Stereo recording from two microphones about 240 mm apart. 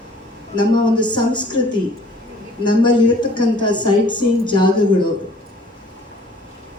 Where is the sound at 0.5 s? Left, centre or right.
Centre.